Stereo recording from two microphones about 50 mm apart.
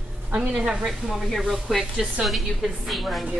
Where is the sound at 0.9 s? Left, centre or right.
Centre.